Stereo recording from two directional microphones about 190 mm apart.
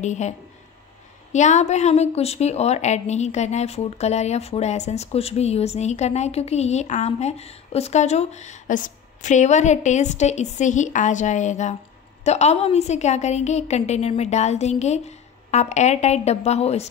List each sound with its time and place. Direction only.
0.0 s a woman's voice: 40° left (ahead or behind)
1.3 s a woman's voice: 40° left (ahead or behind)